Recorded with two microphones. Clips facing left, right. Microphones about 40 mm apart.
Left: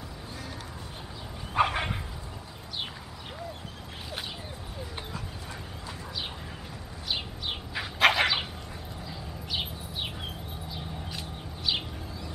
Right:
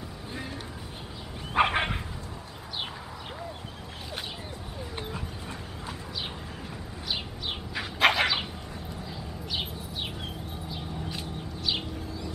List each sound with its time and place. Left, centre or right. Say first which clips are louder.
1.5 s bow-wow: right 2 dB; right
7.1 s bird: even; centre
10.7 s a sound: right 3 dB; centre
11.6 s bird: left 1 dB; centre